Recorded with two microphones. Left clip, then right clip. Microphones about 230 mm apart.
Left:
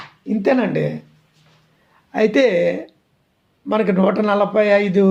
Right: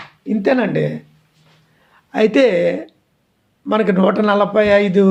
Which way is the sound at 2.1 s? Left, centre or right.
Centre.